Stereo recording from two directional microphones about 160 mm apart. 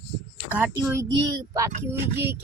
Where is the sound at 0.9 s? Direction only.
20° right (ahead or behind).